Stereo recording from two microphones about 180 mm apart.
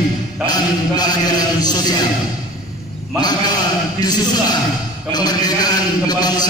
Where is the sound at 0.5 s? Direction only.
20° left (ahead or behind).